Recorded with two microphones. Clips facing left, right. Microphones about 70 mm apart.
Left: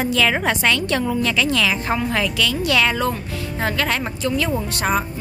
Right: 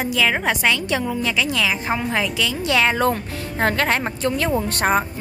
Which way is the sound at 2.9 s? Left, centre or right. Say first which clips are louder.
Right 2 dB; right.